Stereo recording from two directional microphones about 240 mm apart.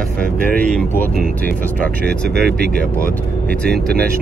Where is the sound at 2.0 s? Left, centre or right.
Right.